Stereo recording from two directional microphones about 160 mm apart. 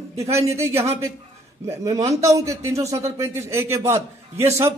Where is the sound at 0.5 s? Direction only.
15° right (ahead or behind).